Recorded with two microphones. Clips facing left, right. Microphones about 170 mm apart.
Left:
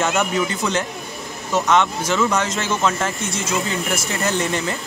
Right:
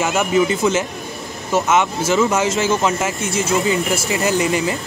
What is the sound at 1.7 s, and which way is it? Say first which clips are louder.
Speech: even; 5° right (ahead or behind).